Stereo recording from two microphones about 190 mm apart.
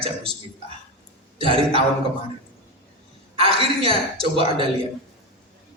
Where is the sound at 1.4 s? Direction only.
30° right (ahead or behind).